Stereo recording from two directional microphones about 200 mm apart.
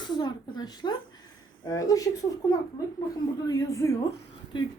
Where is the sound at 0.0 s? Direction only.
20° left (ahead or behind).